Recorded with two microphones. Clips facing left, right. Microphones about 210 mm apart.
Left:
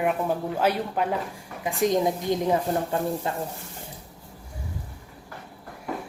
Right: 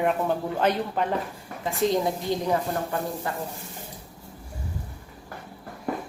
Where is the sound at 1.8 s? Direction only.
20° left (ahead or behind).